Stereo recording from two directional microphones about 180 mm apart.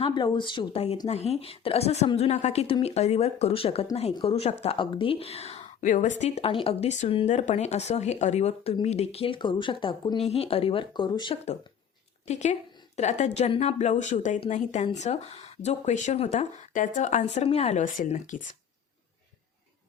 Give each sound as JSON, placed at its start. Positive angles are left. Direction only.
{"t": 0.0, "sound": "speech", "side_deg": 25}
{"t": 12.3, "sound": "speech", "side_deg": 40}